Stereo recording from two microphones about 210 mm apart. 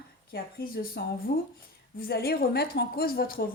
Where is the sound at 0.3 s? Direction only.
45° left (ahead or behind).